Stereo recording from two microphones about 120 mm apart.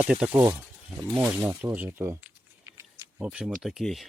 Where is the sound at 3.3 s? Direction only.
5° right (ahead or behind).